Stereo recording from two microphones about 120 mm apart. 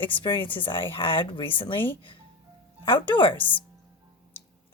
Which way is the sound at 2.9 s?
45° left (ahead or behind).